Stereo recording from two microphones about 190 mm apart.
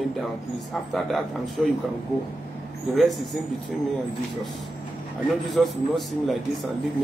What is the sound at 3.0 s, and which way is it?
Speech, centre (ahead or behind).